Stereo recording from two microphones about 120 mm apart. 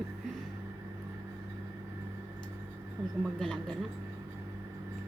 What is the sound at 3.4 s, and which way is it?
Speech, centre (ahead or behind).